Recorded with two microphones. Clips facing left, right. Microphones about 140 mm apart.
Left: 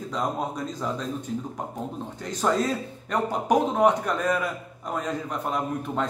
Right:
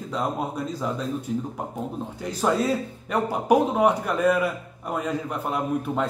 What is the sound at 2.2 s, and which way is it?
A man's voice, 5° right (ahead or behind).